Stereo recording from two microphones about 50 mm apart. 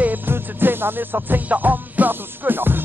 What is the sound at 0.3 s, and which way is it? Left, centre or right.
Music, right.